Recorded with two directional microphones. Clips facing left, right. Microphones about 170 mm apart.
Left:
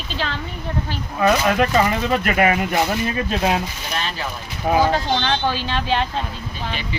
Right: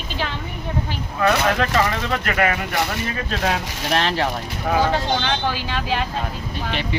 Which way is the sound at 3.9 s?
90° right.